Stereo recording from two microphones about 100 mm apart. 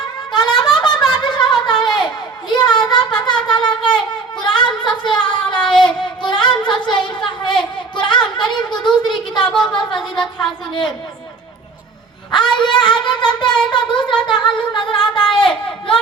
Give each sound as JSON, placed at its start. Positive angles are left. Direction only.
{"t": 0.3, "sound": "a sound", "side_deg": 45}
{"t": 5.6, "sound": "speech", "side_deg": 50}
{"t": 12.3, "sound": "speech", "side_deg": 50}